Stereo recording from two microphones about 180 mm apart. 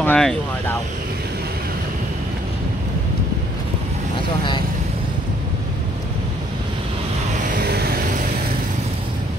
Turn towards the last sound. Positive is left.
turn(degrees=-60)  # may be behind; listen again after turning